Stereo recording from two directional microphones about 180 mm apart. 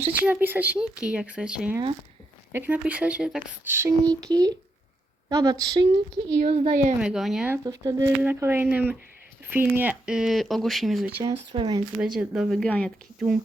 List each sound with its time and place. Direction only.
0.3 s speech: 10° right (ahead or behind)
3.8 s speech: 20° right (ahead or behind)
6.4 s a woman's voice: 40° right (ahead or behind)
7.0 s speech: centre (ahead or behind)
7.5 s speech: 20° right (ahead or behind); by 11.1 s centre (ahead or behind)
11.1 s speech: 20° right (ahead or behind)
11.9 s speech: 5° right (ahead or behind)